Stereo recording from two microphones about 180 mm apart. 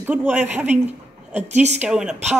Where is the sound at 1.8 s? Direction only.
5° right (ahead or behind).